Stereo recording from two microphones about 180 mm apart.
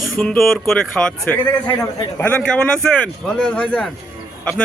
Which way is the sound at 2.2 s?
5° left (ahead or behind).